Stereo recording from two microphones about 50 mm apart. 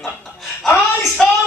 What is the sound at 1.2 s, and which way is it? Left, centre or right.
Speech, centre.